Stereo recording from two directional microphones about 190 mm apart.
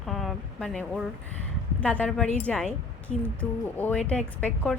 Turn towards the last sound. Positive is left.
turn(degrees=5)  # may be behind; listen again after turning